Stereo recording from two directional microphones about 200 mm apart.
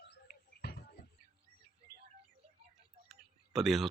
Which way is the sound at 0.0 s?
55° left (ahead or behind).